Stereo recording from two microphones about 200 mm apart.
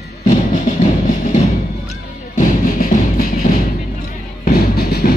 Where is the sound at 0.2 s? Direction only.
40° left (ahead or behind).